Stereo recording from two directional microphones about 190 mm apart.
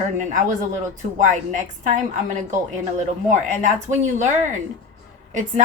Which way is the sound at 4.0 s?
40° right (ahead or behind).